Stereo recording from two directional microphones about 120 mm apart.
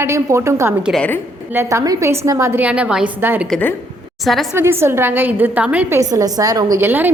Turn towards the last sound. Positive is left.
turn(degrees=-15)  # may be behind; listen again after turning